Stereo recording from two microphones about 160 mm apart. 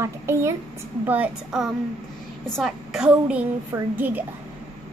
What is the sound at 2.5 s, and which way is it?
A woman's voice, centre (ahead or behind).